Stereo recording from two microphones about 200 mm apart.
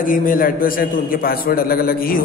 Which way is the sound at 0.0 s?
45° left (ahead or behind).